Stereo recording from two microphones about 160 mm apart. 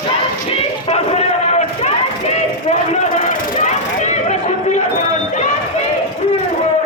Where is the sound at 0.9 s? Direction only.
40° left (ahead or behind).